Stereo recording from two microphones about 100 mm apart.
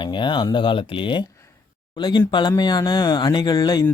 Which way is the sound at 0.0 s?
55° left (ahead or behind).